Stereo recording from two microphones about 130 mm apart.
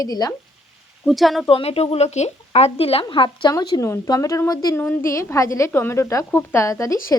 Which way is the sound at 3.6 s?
20° left (ahead or behind).